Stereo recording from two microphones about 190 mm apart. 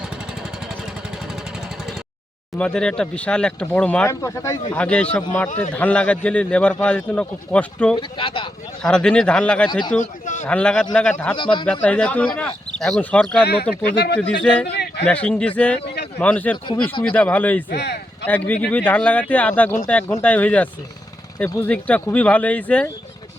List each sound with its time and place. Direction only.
2.6 s a man's voice: 5° left (ahead or behind)
4.7 s a man's voice: 5° left (ahead or behind)
7.9 s speech: 25° left (ahead or behind)
8.8 s speech: 5° left (ahead or behind)
10.0 s a man's voice: 40° left (ahead or behind)
10.4 s a man's voice: 5° left (ahead or behind)
11.3 s speech: 25° left (ahead or behind)
11.6 s a man's voice: 5° left (ahead or behind)
13.8 s speech: 60° left (ahead or behind)
14.4 s speech: 5° left (ahead or behind)
14.7 s a sound: 60° left (ahead or behind)
15.0 s a man's voice: 5° left (ahead or behind)
17.7 s a sound: 60° left (ahead or behind)
18.3 s a man's voice: 10° left (ahead or behind)